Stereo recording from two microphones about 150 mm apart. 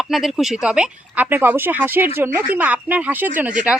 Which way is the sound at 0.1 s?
Centre (ahead or behind).